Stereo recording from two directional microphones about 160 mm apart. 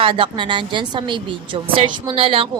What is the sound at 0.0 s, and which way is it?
A woman's voice, 30° right (ahead or behind).